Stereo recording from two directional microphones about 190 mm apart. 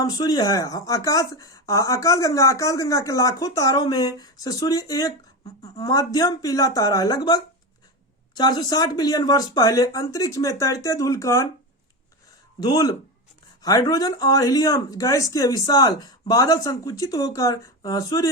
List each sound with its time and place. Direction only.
0.0 s speech: 20° left (ahead or behind)
12.5 s speech: 20° left (ahead or behind)